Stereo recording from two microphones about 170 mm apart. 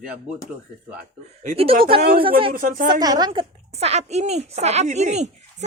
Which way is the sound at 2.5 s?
55° right (ahead or behind).